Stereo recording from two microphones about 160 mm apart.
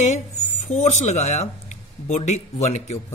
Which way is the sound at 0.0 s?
45° left (ahead or behind).